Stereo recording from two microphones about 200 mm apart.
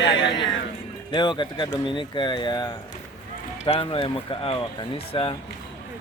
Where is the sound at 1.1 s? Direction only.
20° left (ahead or behind).